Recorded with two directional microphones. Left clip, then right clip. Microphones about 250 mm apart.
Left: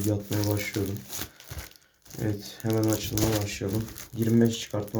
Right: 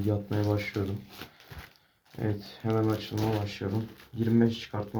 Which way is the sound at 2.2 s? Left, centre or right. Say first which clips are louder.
Left 2 dB; centre.